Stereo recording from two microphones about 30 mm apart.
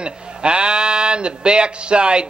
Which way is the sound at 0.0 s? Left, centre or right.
Right.